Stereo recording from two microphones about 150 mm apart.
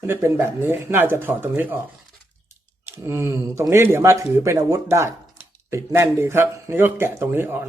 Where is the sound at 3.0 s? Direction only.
15° right (ahead or behind).